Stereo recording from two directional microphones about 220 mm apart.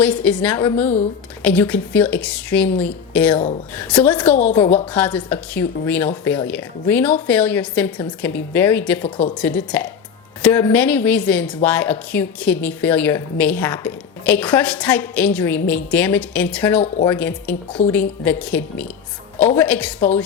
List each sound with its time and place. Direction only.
0.0 s a woman's voice: 5° left (ahead or behind)
4.6 s a woman's voice: 25° left (ahead or behind)
4.9 s a woman's voice: 5° left (ahead or behind)